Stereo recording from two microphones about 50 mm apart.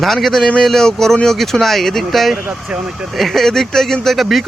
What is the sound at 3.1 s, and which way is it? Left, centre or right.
Speech, centre.